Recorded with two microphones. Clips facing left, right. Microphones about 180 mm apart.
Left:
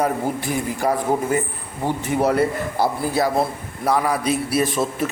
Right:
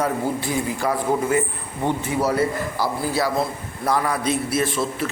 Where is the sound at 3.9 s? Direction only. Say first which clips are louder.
Left 2 dB; 5° left (ahead or behind).